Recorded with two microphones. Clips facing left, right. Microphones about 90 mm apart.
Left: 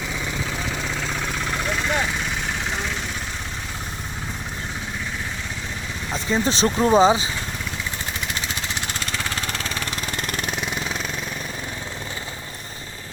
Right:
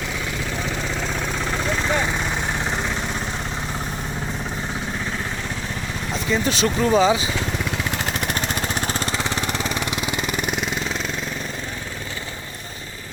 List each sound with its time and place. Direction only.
1.0 s vehicle: 5° right (ahead or behind)
6.3 s speech: 30° left (ahead or behind)
7.9 s vehicle: 70° right (ahead or behind); by 9.0 s 40° right (ahead or behind)
9.1 s vehicle: 20° right (ahead or behind); by 10.9 s centre (ahead or behind)